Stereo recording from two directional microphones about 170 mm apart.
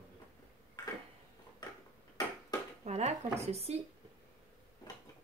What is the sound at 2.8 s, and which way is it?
Speech, 40° right (ahead or behind).